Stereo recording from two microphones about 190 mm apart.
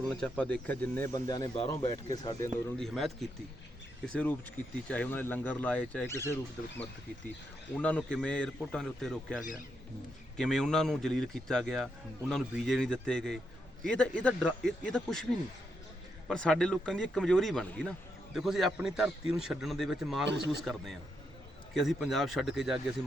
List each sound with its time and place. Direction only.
0.1 s speech: 5° left (ahead or behind)
2.7 s a man's voice: centre (ahead or behind)
16.3 s a man's voice: 5° left (ahead or behind)
20.2 s speech: 65° right (ahead or behind)
20.7 s a man's voice: centre (ahead or behind)